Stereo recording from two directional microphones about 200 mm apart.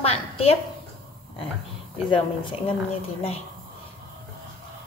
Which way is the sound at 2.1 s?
25° left (ahead or behind).